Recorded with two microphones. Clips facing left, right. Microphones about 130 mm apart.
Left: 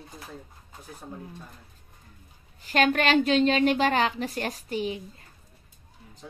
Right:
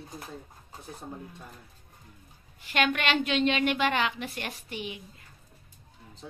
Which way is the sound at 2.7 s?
40° left (ahead or behind).